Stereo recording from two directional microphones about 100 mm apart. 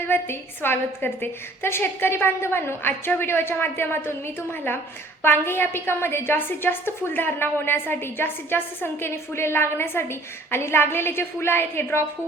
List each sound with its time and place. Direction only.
0.1 s a woman's voice: 25° left (ahead or behind)